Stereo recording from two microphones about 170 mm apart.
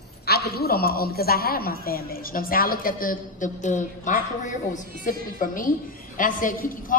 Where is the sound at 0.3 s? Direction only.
70° left (ahead or behind).